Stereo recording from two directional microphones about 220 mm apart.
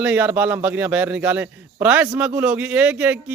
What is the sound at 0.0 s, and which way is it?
A man's voice, 5° right (ahead or behind).